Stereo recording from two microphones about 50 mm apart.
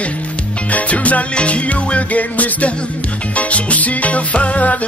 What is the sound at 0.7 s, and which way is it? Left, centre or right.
Music, left.